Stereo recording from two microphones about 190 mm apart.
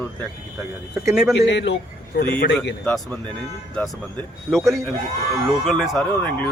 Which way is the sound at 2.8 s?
5° left (ahead or behind).